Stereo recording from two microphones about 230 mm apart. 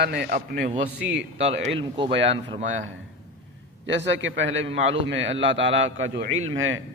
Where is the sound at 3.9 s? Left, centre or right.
Right.